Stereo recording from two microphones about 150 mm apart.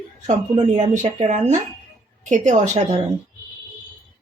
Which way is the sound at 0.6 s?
50° right (ahead or behind).